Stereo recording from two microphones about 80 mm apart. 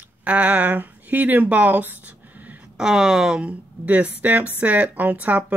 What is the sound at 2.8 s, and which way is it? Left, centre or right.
Speech, centre.